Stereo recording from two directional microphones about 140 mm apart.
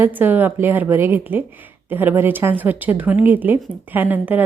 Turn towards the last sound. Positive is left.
turn(degrees=-10)  # may be behind; listen again after turning